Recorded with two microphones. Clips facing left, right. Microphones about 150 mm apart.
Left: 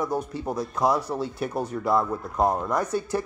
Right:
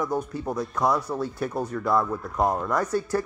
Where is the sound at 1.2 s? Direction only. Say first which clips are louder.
Even; 25° left (ahead or behind).